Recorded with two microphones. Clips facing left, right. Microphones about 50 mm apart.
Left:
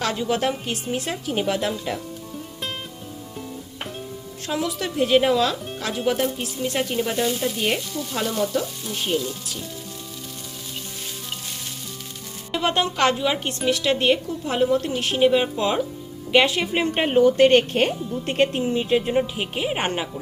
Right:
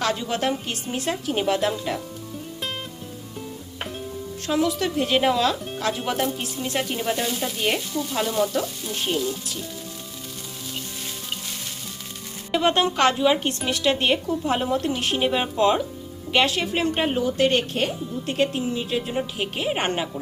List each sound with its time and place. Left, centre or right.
0.0 s speech: centre
4.4 s speech: centre
12.5 s a woman's voice: centre
17.2 s speech: left
19.4 s speech: centre